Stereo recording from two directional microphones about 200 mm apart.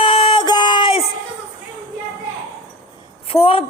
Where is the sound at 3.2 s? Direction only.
30° left (ahead or behind).